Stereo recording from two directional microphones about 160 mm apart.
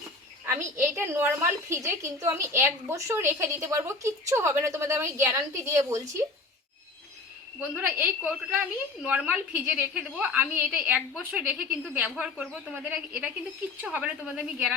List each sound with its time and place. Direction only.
0.4 s a woman's voice: 15° right (ahead or behind)
7.8 s a woman's voice: 10° right (ahead or behind)